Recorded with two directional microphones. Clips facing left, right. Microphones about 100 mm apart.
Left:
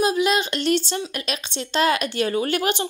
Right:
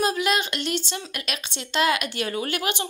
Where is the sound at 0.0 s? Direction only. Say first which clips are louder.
Left 3 dB; 20° left (ahead or behind).